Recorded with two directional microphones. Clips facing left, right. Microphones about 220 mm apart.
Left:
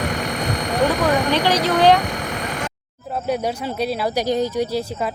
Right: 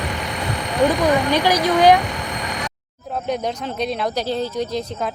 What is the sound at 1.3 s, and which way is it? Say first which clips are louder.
Speech: right 1 dB; 10° right (ahead or behind).